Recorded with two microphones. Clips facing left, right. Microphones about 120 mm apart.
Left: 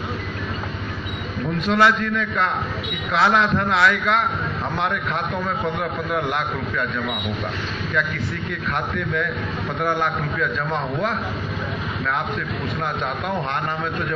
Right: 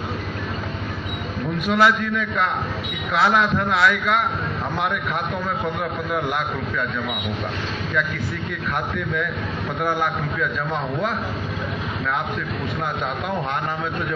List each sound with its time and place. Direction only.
1.7 s a man's voice: 10° right (ahead or behind)
9.8 s a man's voice: 5° right (ahead or behind)